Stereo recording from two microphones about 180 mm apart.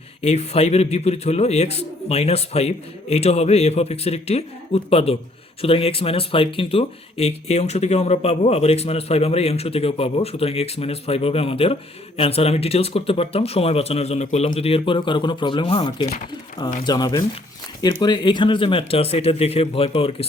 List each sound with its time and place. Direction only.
0.2 s speech: 35° left (ahead or behind)